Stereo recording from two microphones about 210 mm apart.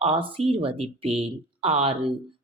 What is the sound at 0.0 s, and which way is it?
Speech, 25° right (ahead or behind).